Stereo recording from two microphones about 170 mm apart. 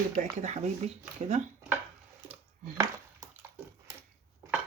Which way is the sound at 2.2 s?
15° right (ahead or behind).